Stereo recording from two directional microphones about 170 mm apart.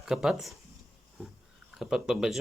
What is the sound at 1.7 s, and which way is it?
Speech, 5° right (ahead or behind).